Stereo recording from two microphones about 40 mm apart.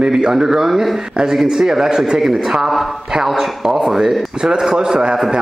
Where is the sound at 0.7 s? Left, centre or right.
Centre.